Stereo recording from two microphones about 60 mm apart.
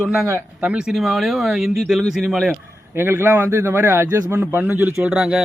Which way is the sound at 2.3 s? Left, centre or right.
Centre.